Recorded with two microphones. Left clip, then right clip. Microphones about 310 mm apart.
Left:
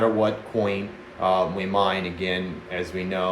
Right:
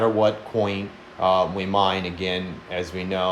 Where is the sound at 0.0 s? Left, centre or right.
Centre.